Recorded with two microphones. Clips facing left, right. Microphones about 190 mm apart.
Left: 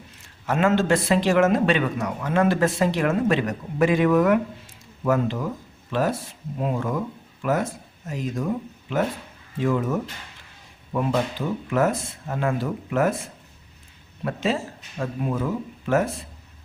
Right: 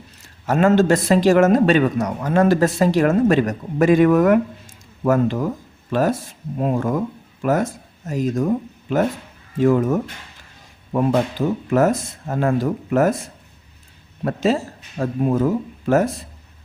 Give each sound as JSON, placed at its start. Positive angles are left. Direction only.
{"t": 0.4, "sound": "a man's voice", "side_deg": -40}
{"t": 14.3, "sound": "a man's voice", "side_deg": -40}